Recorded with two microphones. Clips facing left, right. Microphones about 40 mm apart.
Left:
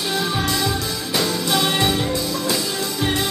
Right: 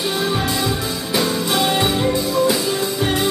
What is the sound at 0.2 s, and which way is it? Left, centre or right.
Music, centre.